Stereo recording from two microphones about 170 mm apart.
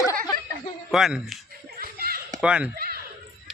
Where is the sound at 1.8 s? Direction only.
60° right (ahead or behind).